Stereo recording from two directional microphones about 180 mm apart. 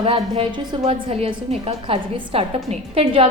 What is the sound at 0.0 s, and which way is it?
Speech, 30° right (ahead or behind).